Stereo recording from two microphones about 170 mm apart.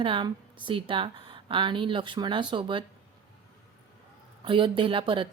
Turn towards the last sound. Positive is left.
turn(degrees=-30)  # may be behind; listen again after turning